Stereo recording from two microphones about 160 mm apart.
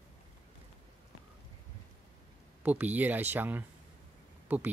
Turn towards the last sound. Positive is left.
turn(degrees=-10)  # may be behind; listen again after turning